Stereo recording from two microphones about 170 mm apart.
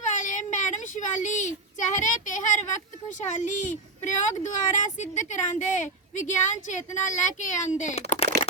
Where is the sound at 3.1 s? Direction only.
50° left (ahead or behind).